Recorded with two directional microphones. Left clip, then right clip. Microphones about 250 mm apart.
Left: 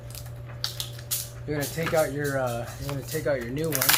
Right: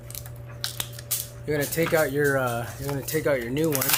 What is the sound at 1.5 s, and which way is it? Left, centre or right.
Speech, right.